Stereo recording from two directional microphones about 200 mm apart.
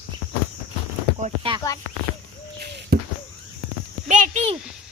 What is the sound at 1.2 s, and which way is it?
Speech, 25° right (ahead or behind).